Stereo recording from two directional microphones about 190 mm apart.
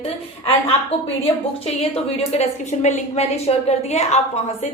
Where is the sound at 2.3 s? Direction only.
35° left (ahead or behind).